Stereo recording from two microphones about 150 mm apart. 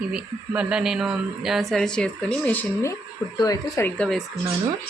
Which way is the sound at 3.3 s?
25° left (ahead or behind).